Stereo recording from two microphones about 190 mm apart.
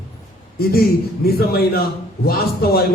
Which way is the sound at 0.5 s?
55° left (ahead or behind).